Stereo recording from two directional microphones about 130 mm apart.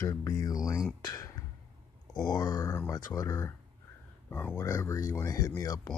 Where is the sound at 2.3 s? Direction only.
30° left (ahead or behind).